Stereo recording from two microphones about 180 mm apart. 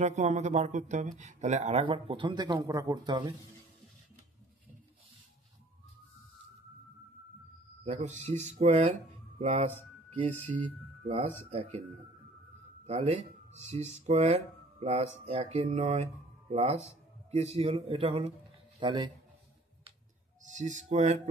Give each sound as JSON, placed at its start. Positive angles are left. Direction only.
{"t": 0.0, "sound": "speech", "side_deg": -40}
{"t": 7.8, "sound": "speech", "side_deg": -40}
{"t": 11.1, "sound": "speech", "side_deg": -35}
{"t": 12.8, "sound": "speech", "side_deg": -35}
{"t": 20.4, "sound": "speech", "side_deg": -40}